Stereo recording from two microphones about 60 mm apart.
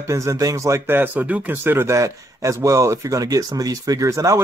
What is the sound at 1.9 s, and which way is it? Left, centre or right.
A man's voice, right.